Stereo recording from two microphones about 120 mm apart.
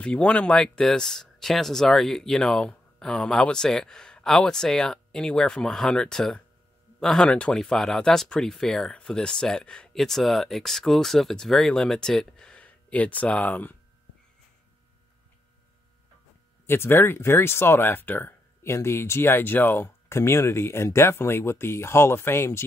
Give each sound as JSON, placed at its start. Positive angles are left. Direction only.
{"t": 0.0, "sound": "speech", "side_deg": 10}
{"t": 16.6, "sound": "speech", "side_deg": 20}